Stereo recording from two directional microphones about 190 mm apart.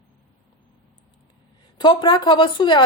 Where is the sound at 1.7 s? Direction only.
25° left (ahead or behind).